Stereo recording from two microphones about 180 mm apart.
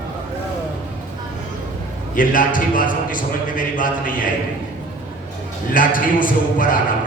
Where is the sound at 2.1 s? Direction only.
50° left (ahead or behind).